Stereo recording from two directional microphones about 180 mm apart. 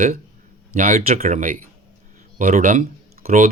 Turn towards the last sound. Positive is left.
turn(degrees=-50)  # may be behind; listen again after turning